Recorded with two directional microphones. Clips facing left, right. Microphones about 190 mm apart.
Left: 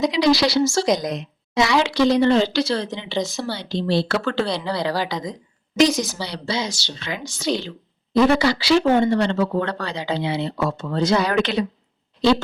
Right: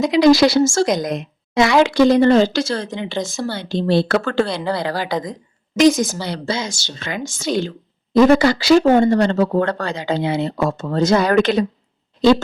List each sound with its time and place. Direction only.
0.1 s a woman's voice: 50° right (ahead or behind)